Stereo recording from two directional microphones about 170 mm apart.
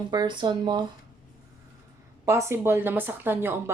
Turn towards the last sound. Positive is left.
turn(degrees=-15)  # may be behind; listen again after turning